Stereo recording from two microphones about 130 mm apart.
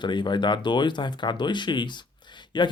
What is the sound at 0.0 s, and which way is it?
Speech, 35° left (ahead or behind).